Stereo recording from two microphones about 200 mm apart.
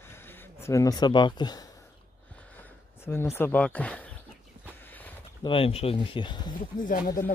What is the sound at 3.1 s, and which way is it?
Speech, 10° left (ahead or behind).